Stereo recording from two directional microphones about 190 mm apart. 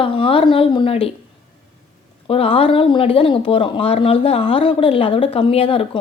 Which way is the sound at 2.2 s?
30° left (ahead or behind).